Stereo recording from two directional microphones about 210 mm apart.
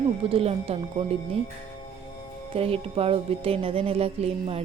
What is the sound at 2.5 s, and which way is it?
A woman's voice, 25° right (ahead or behind).